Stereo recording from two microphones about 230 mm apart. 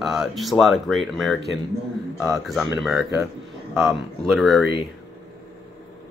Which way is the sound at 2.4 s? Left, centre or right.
Centre.